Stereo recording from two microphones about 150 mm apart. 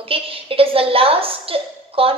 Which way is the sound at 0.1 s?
40° right (ahead or behind).